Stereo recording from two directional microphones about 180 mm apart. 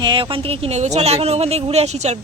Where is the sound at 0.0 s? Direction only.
25° right (ahead or behind).